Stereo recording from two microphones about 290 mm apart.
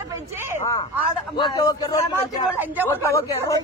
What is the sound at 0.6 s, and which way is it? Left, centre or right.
Speech, centre.